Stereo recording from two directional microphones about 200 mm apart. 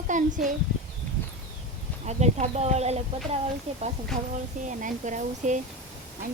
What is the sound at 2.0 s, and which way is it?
A woman's voice, 35° right (ahead or behind).